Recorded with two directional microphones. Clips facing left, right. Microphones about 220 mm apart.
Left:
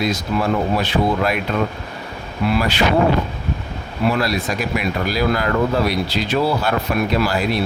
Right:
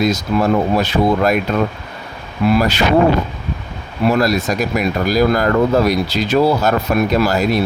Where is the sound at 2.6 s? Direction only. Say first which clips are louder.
Right 4 dB; 40° right (ahead or behind).